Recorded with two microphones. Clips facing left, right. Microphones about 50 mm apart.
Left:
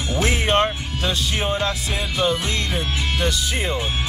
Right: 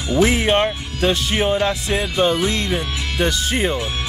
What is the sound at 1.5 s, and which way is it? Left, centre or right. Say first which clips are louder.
Speech: right 4 dB; right.